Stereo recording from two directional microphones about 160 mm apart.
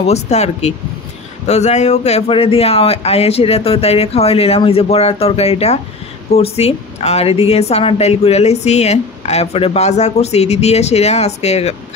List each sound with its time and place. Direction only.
0.0 s a woman's voice: 45° left (ahead or behind)